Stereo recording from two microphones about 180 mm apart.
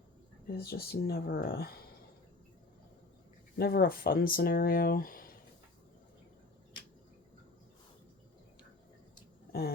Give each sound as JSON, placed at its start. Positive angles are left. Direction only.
{"t": 0.6, "sound": "speech", "side_deg": 60}
{"t": 3.6, "sound": "speech", "side_deg": 60}
{"t": 9.5, "sound": "a sound", "side_deg": 60}